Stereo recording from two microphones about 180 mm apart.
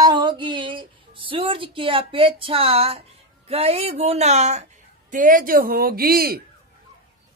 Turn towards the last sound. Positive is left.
turn(degrees=-55)  # may be behind; listen again after turning